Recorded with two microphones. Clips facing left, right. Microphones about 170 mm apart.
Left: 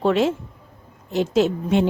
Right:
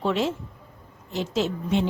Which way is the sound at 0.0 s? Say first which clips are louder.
Left 6 dB; 60° left (ahead or behind).